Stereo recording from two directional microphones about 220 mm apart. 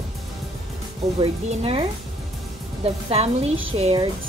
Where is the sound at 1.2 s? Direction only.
25° right (ahead or behind).